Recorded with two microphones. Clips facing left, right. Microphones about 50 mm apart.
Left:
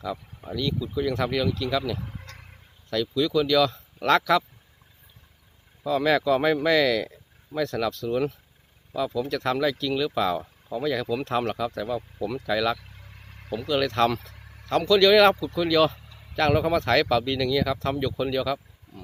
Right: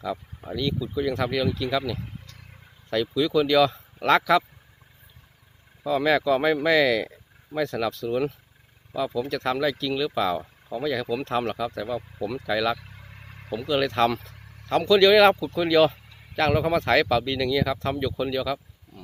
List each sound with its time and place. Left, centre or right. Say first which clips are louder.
0.0 s speech: right 1 dB; centre
5.8 s speech: even; centre
12.8 s vehicle: right 3 dB; centre
13.5 s speech: right 1 dB; centre